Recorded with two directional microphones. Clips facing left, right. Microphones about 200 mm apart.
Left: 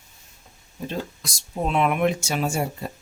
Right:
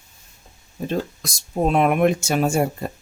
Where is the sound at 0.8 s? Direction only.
50° right (ahead or behind).